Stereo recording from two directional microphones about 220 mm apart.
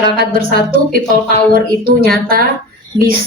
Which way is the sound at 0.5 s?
45° right (ahead or behind).